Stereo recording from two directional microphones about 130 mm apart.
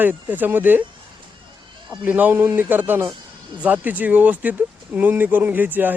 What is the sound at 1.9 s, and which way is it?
Speech, 10° right (ahead or behind).